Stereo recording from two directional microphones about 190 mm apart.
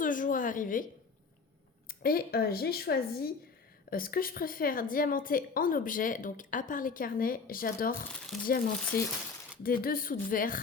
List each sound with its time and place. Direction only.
0.0 s a sound: 45° left (ahead or behind)
1.9 s a woman's voice: 50° left (ahead or behind)
8.9 s a woman's voice: 50° left (ahead or behind)